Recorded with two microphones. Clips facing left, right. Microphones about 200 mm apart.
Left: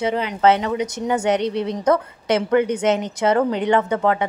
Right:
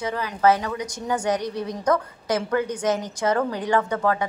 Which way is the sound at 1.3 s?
65° left (ahead or behind).